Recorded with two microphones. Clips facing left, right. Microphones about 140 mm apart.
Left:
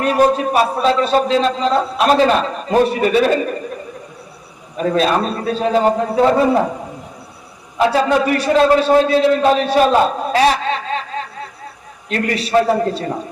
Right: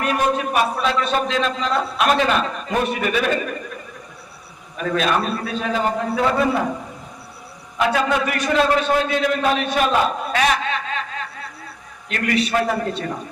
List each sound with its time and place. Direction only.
0.0 s a man's voice: 35° left (ahead or behind)
4.8 s a man's voice: 35° left (ahead or behind)
7.8 s a man's voice: 35° left (ahead or behind)